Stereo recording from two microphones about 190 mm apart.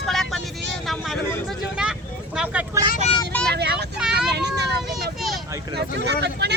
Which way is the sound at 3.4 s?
60° right (ahead or behind).